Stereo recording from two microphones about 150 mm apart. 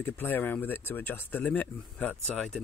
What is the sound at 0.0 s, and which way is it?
Speech, 15° left (ahead or behind).